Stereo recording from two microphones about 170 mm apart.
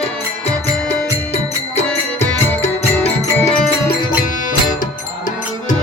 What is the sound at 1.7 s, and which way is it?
Music, 40° left (ahead or behind).